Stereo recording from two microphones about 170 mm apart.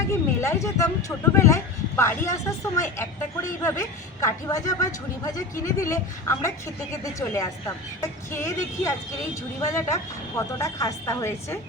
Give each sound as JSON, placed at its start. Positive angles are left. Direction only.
{"t": 0.1, "sound": "speech", "side_deg": 15}